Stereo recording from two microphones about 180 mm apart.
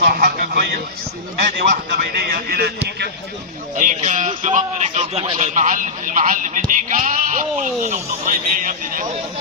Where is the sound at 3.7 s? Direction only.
45° right (ahead or behind).